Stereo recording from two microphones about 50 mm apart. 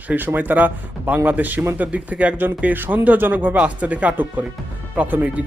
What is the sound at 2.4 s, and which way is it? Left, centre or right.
Speech, right.